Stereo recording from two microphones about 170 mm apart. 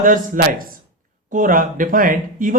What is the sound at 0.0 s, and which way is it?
Speech, 55° right (ahead or behind).